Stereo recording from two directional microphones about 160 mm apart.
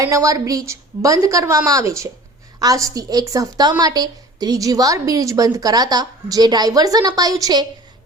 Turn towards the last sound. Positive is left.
turn(degrees=-25)  # may be behind; listen again after turning